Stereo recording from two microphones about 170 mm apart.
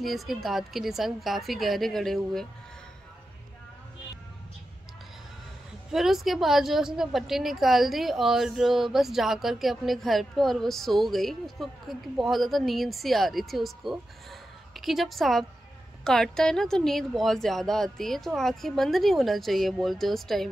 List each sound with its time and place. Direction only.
0.0 s a woman's voice: centre (ahead or behind)
5.9 s a woman's voice: centre (ahead or behind)